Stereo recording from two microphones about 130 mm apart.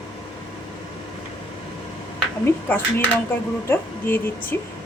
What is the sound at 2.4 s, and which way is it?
A woman's voice, 15° left (ahead or behind).